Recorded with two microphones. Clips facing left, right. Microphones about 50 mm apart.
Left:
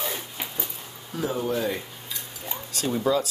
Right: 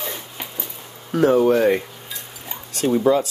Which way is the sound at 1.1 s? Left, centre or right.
Right.